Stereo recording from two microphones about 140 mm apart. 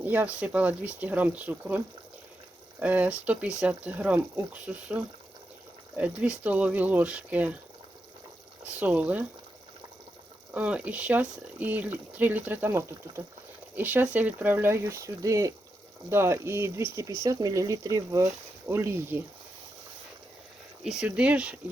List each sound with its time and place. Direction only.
0.0 s speech: 10° right (ahead or behind)
2.8 s speech: 10° right (ahead or behind)
8.6 s speech: 10° right (ahead or behind)
10.5 s speech: 10° right (ahead or behind)
20.8 s speech: 5° right (ahead or behind)